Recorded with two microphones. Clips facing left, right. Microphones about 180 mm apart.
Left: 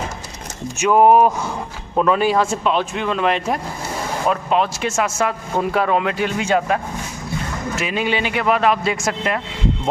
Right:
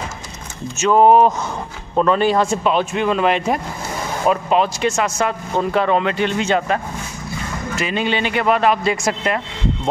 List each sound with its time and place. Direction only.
0.7 s speech: 10° left (ahead or behind)